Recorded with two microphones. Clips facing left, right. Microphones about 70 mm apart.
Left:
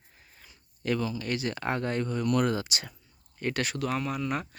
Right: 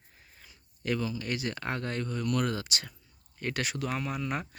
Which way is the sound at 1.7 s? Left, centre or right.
Left.